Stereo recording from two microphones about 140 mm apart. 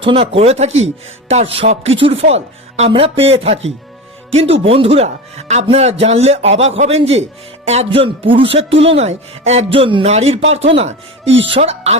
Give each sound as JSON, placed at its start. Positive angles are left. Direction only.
{"t": 0.0, "sound": "speech", "side_deg": -40}